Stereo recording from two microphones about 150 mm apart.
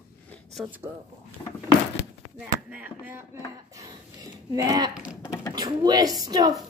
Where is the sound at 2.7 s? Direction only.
10° right (ahead or behind).